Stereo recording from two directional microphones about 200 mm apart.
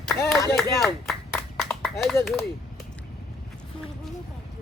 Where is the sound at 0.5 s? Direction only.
Centre (ahead or behind).